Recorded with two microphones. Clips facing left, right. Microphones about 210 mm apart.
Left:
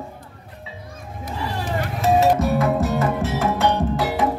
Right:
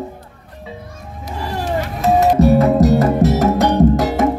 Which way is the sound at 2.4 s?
35° right (ahead or behind).